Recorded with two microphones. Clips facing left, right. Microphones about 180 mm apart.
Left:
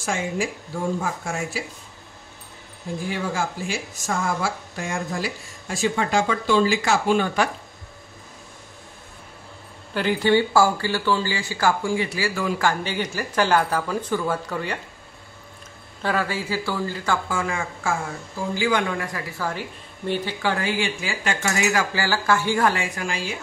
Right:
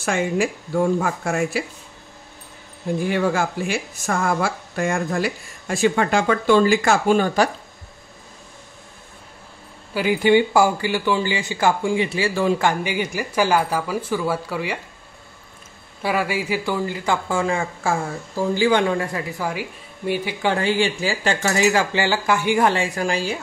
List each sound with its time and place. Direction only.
0.0 s speech: 65° right (ahead or behind)
3.1 s speech: 65° right (ahead or behind); by 7.4 s 45° right (ahead or behind)
9.9 s speech: 10° right (ahead or behind)
12.8 s speech: 10° right (ahead or behind)
16.0 s speech: 10° right (ahead or behind)
17.3 s speech: 30° right (ahead or behind)
20.1 s speech: 15° right (ahead or behind)
20.5 s speech: 30° right (ahead or behind)
22.9 s speech: 35° right (ahead or behind)